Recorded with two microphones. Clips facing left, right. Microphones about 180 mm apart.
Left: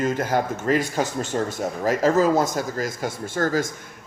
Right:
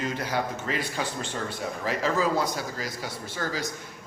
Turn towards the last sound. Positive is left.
turn(degrees=50)  # may be behind; listen again after turning